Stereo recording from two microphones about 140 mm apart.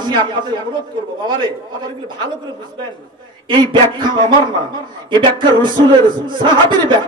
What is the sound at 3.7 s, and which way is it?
A man's voice, 35° right (ahead or behind).